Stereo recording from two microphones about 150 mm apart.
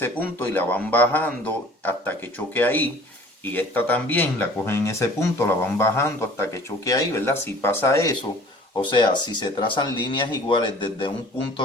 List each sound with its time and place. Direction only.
0.0 s speech: 15° left (ahead or behind)
8.8 s speech: 30° left (ahead or behind)